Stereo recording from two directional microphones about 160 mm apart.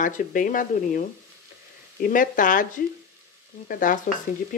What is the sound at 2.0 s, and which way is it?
Speech, 55° left (ahead or behind).